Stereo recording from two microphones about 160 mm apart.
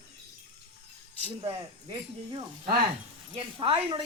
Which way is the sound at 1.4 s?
30° right (ahead or behind).